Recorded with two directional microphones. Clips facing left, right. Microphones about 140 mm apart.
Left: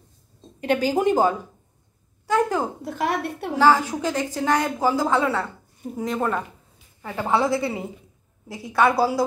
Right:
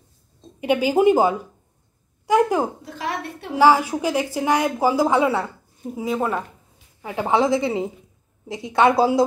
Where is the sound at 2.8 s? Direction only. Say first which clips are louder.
Left 4 dB; 55° left (ahead or behind).